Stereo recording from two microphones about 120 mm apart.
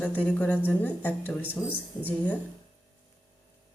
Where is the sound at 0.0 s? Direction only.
10° left (ahead or behind).